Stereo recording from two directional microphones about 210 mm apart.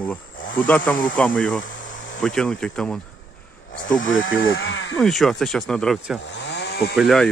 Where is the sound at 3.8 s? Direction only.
40° left (ahead or behind).